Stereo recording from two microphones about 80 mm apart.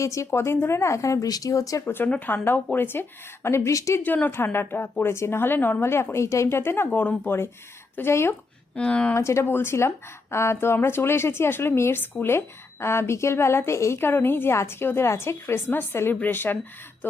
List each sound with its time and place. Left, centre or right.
0.0 s a woman's voice: left
2.0 s a woman's voice: left
4.0 s a woman's voice: left
8.7 s speech: centre
9.1 s a woman's voice: left